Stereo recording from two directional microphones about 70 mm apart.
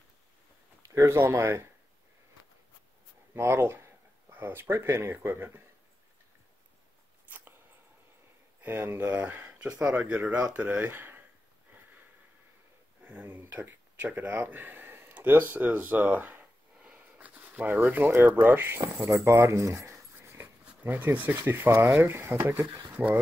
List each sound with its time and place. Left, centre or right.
0.9 s speech: right
3.3 s speech: right
7.2 s a sound: right
8.6 s speech: right
9.8 s speech: centre
13.0 s speech: right
16.9 s a sound: right
17.7 s speech: right
19.0 s speech: right
20.2 s a sound: right
21.4 s speech: right